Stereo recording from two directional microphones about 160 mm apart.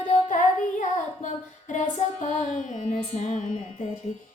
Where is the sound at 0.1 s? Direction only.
50° left (ahead or behind).